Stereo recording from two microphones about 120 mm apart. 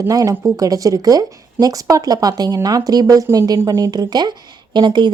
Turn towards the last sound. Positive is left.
turn(degrees=-40)  # may be behind; listen again after turning